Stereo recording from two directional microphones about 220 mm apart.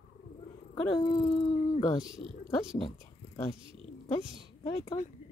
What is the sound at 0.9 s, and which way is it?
Speech, 20° left (ahead or behind).